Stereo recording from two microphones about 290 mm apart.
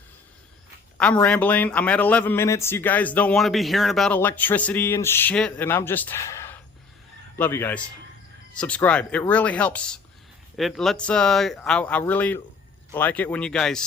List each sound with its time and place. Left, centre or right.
0.9 s a man's voice: centre